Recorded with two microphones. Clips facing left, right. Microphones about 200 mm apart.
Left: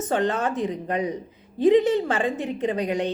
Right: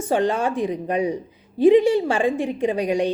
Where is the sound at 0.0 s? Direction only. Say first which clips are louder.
Right 3 dB; 10° right (ahead or behind).